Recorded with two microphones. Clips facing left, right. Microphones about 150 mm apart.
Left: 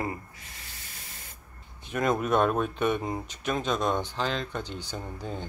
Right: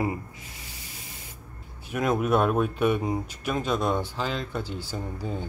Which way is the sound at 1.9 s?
5° right (ahead or behind).